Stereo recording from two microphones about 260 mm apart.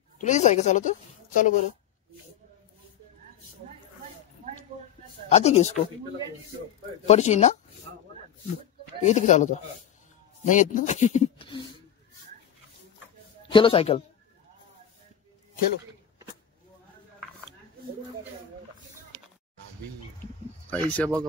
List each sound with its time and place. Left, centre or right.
0.2 s a woman's voice: left
5.3 s speech: left
7.1 s speech: left
9.0 s speech: left
13.5 s a woman's voice: centre
20.7 s speech: centre